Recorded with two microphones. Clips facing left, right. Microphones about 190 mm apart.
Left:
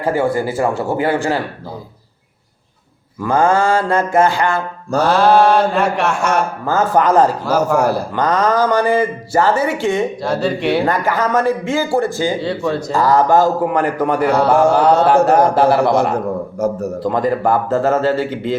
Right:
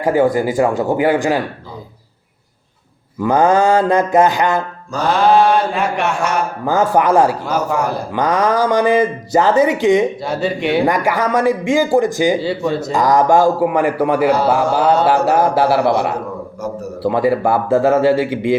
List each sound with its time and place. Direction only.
0.0 s speech: 15° right (ahead or behind)
3.2 s speech: 20° right (ahead or behind)
5.0 s mantra: centre (ahead or behind)
6.7 s speech: 10° right (ahead or behind)
7.4 s mantra: 5° left (ahead or behind)
8.1 s speech: 10° right (ahead or behind)
10.2 s mantra: centre (ahead or behind)
10.8 s speech: 15° right (ahead or behind)
12.4 s mantra: centre (ahead or behind)
12.9 s speech: 15° right (ahead or behind)
14.8 s mantra: 5° right (ahead or behind)
16.6 s a man's voice: 50° left (ahead or behind)
17.0 s speech: 10° right (ahead or behind)